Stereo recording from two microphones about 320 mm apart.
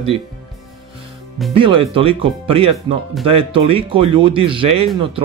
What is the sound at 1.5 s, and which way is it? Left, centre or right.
Speech, centre.